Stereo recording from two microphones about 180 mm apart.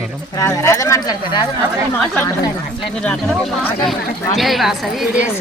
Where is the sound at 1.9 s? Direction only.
10° left (ahead or behind).